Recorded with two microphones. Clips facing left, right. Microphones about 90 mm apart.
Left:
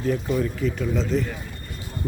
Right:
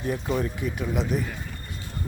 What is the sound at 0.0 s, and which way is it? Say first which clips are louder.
Speech: left 3 dB; 20° right (ahead or behind).